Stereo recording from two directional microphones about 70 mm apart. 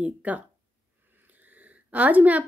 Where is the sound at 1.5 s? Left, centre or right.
Right.